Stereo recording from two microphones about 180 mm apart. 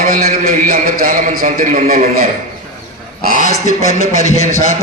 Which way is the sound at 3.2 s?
50° left (ahead or behind).